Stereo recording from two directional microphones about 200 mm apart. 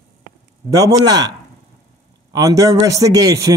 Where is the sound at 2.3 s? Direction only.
15° right (ahead or behind).